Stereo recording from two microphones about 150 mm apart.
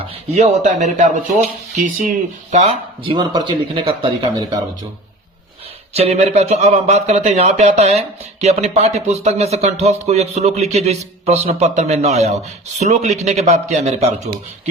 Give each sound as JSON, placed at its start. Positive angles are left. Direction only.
{"t": 0.3, "sound": "speech", "side_deg": -50}
{"t": 3.0, "sound": "speech", "side_deg": -35}
{"t": 5.9, "sound": "speech", "side_deg": -45}